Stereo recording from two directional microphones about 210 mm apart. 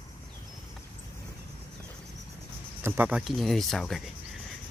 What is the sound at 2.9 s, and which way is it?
Speech, 5° right (ahead or behind).